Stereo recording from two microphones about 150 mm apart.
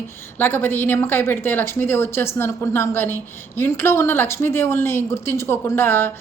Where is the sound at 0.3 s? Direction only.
15° left (ahead or behind).